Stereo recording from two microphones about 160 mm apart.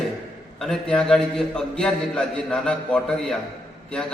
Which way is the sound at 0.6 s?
5° left (ahead or behind).